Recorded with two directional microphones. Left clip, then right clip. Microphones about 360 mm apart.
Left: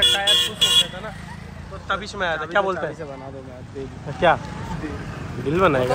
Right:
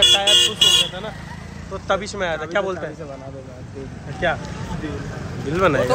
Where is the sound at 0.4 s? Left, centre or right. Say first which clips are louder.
Right 3 dB; right.